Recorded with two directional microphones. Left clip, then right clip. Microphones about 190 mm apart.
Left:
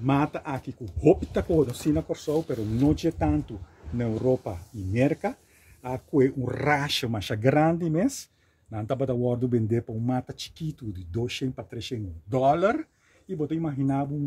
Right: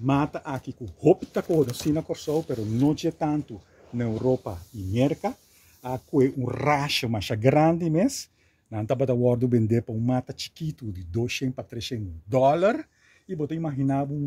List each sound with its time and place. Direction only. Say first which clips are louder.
0.0 s speech: even; 20° right (ahead or behind)
1.6 s speech: even; 35° right (ahead or behind)